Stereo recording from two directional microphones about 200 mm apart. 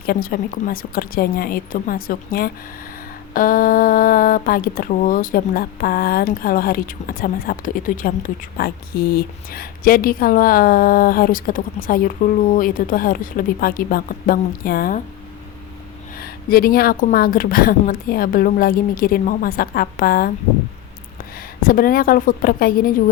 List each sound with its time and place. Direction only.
0.0 s speech: 50° left (ahead or behind)
16.1 s a woman's voice: 45° left (ahead or behind)